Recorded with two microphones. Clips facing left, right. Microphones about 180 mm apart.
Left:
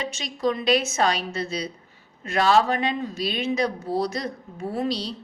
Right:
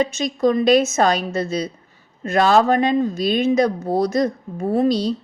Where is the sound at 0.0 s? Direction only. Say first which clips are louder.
Right 8 dB; 45° right (ahead or behind).